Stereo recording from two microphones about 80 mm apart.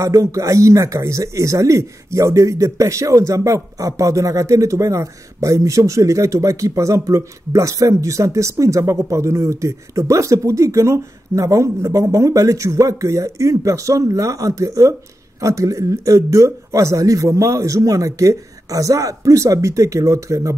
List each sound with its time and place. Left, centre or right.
0.0 s a man's voice: right